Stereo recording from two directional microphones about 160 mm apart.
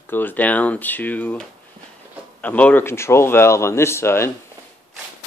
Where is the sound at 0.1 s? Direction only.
10° left (ahead or behind).